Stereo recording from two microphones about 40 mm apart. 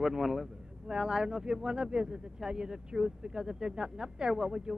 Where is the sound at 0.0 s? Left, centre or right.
Centre.